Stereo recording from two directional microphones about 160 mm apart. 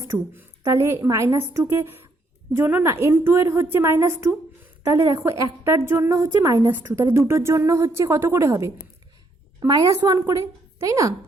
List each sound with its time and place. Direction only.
0.0 s a woman's voice: 15° right (ahead or behind)